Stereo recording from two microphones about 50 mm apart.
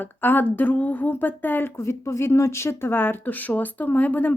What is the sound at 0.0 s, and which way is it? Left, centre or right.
Speech, left.